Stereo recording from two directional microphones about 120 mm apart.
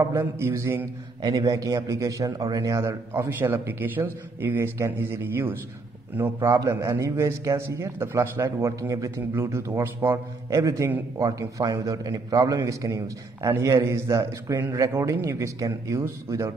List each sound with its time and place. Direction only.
0.0 s a man's voice: 25° right (ahead or behind)